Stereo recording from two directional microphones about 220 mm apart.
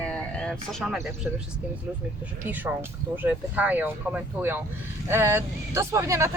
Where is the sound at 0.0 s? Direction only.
5° left (ahead or behind).